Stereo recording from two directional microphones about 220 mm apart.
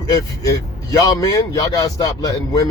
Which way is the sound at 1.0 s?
15° left (ahead or behind).